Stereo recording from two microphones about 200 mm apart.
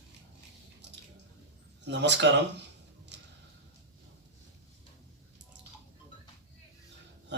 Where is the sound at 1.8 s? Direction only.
60° right (ahead or behind).